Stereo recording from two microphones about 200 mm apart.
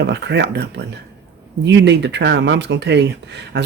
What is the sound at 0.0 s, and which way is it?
Speech, 60° right (ahead or behind).